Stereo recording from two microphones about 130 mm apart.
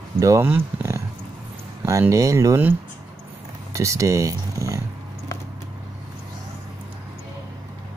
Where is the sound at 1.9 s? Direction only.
25° right (ahead or behind).